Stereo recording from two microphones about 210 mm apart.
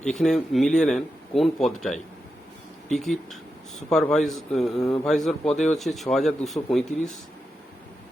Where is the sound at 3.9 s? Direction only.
Centre (ahead or behind).